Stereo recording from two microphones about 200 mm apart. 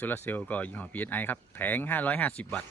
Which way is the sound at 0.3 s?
10° left (ahead or behind).